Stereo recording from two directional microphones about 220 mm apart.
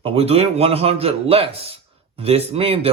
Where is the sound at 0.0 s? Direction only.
25° right (ahead or behind).